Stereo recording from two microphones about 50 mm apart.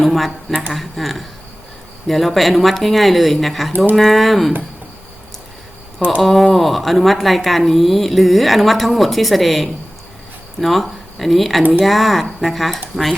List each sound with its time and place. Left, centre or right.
0.0 s speech: centre
6.2 s speech: centre